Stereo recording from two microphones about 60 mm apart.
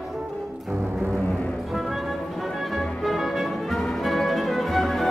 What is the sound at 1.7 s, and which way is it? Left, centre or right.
Music, centre.